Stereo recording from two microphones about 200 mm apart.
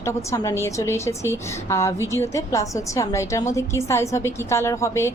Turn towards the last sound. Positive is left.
turn(degrees=15)  # may be behind; listen again after turning